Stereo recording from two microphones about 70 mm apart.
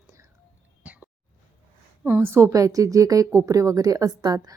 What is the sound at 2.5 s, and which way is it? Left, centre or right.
A woman's voice, right.